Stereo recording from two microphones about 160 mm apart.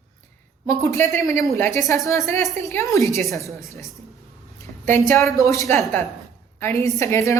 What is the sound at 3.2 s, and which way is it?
Speech, centre (ahead or behind).